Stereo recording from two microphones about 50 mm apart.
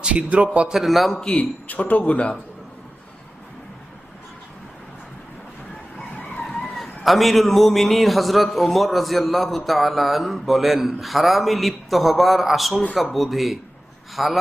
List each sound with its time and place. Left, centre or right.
0.0 s a man's voice: right
0.7 s a man's voice: centre
1.4 s speech: left
6.4 s a man's voice: centre